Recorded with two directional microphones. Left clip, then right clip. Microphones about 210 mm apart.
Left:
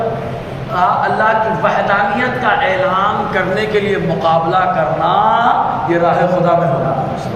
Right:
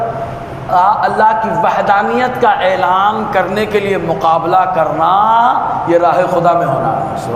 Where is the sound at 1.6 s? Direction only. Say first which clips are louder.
Right 3 dB; 55° right (ahead or behind).